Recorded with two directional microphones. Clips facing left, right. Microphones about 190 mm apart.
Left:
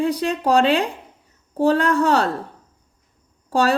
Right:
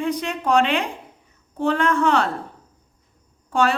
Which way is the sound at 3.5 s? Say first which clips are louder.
Left 2 dB; 35° left (ahead or behind).